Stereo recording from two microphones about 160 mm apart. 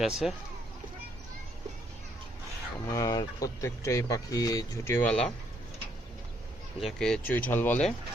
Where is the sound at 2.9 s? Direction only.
20° left (ahead or behind); by 5.3 s 5° left (ahead or behind).